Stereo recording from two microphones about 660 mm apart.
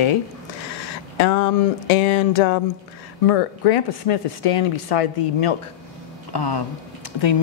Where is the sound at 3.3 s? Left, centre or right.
Left.